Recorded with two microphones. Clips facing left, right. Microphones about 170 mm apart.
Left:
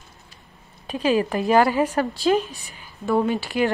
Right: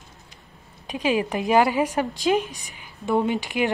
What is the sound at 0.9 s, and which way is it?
A woman's voice, 15° right (ahead or behind).